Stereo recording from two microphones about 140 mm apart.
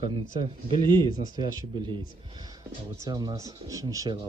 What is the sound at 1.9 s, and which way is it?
A man's voice, 30° right (ahead or behind).